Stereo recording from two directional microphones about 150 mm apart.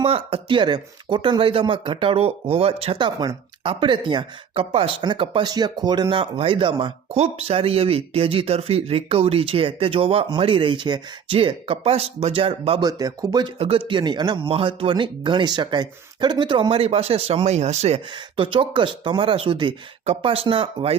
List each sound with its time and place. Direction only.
0.0 s speech: 40° right (ahead or behind)
12.8 s speech: 25° right (ahead or behind)
13.6 s speech: 40° right (ahead or behind)